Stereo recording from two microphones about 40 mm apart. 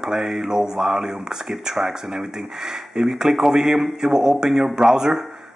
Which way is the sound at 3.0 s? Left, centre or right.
Centre.